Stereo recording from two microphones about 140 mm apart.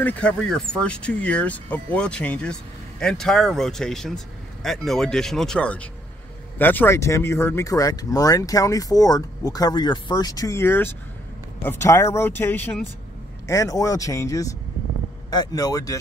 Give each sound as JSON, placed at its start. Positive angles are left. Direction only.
{"t": 0.0, "sound": "speech", "side_deg": 10}